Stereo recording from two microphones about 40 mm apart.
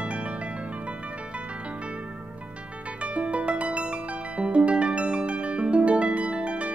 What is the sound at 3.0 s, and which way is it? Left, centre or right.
Music, right.